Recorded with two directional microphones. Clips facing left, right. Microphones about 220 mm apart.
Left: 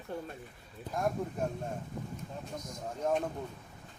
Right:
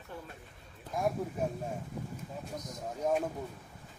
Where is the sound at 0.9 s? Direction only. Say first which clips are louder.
Right 1 dB; 5° right (ahead or behind).